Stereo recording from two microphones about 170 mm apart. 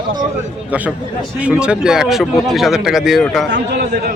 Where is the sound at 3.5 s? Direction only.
80° right.